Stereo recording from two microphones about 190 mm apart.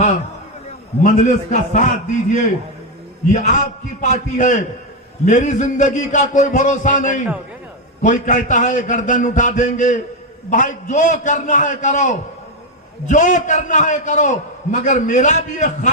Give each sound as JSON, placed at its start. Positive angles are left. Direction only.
{"t": 1.0, "sound": "a man's voice", "side_deg": 40}
{"t": 3.3, "sound": "a man's voice", "side_deg": 40}